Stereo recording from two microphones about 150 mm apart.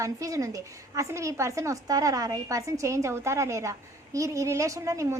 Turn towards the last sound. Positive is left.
turn(degrees=-20)  # may be behind; listen again after turning